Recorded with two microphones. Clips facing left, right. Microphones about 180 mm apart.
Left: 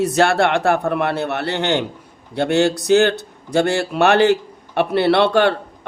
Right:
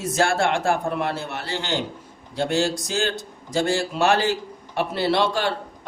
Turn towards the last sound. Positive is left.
turn(degrees=65)  # may be behind; listen again after turning